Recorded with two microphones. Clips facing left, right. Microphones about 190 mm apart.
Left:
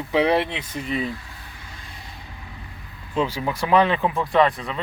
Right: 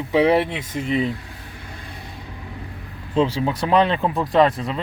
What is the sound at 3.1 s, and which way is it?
Speech, 30° right (ahead or behind).